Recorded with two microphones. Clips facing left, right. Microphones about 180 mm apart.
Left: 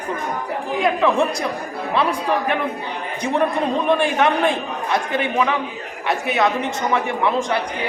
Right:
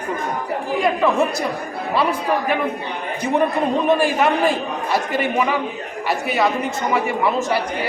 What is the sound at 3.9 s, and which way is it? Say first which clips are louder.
A man's voice: even; 5° right (ahead or behind).